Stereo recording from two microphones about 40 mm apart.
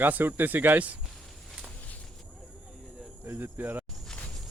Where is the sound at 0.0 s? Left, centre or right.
Right.